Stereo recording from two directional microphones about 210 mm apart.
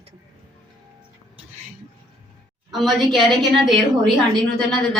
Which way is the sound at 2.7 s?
Centre (ahead or behind).